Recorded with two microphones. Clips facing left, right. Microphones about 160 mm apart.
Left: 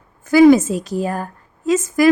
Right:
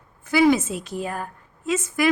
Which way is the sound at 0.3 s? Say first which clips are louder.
Left 8 dB; 40° left (ahead or behind).